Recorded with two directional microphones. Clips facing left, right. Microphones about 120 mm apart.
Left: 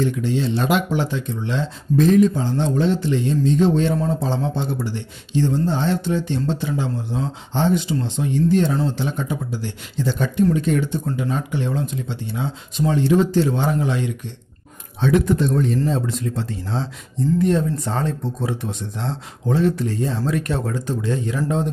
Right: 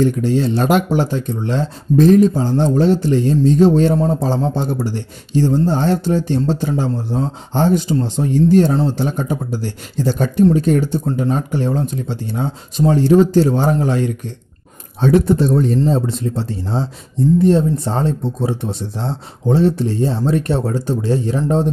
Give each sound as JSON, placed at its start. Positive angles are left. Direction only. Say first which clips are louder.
{"t": 0.0, "sound": "speech", "louder": "right 5 dB", "side_deg": -45}